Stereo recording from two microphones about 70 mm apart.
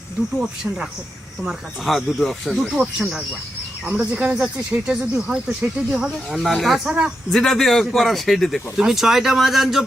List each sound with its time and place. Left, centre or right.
1.8 s speech: centre